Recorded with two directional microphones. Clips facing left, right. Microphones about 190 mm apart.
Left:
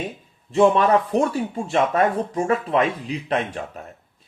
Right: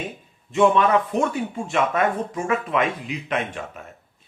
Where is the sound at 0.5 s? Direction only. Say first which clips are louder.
Left 1 dB; 35° left (ahead or behind).